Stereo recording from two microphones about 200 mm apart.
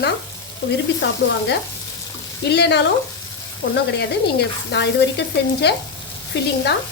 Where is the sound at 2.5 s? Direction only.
55° left (ahead or behind).